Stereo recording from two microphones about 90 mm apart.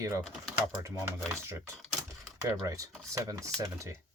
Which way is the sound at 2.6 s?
40° right (ahead or behind).